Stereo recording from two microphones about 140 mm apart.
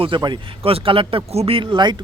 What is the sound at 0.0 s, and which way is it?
Speech, 35° right (ahead or behind).